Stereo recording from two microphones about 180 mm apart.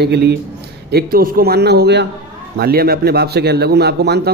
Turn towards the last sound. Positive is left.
turn(degrees=-65)  # may be behind; listen again after turning